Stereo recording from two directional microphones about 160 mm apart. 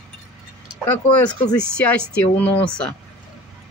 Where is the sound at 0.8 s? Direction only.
10° left (ahead or behind).